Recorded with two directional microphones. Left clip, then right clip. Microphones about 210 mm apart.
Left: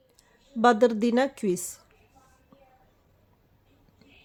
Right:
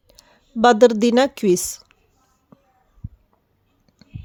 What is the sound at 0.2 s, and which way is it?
A woman's voice, 45° right (ahead or behind).